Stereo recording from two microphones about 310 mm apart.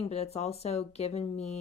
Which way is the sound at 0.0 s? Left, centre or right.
Centre.